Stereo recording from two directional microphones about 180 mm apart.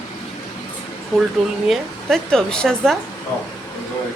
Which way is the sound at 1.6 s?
Centre (ahead or behind).